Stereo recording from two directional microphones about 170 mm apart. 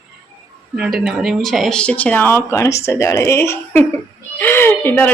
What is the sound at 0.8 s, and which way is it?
Speech, 5° right (ahead or behind).